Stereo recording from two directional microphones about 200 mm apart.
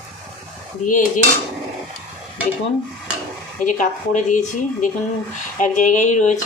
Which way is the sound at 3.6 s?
40° left (ahead or behind).